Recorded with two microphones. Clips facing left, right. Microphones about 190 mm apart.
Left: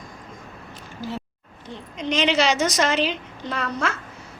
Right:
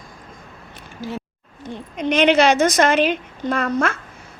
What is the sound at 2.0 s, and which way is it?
A woman's voice, 60° right (ahead or behind).